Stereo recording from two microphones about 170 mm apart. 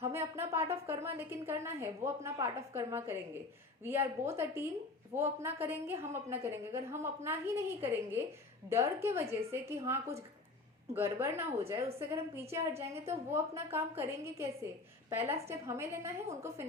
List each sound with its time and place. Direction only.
0.0 s a woman's voice: 15° right (ahead or behind)